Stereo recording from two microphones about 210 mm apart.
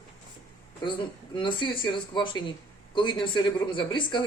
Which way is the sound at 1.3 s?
20° left (ahead or behind).